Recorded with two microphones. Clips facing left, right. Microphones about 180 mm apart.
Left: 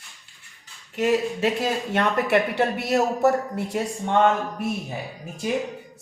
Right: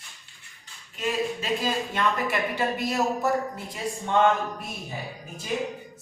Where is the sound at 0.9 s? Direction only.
70° left (ahead or behind).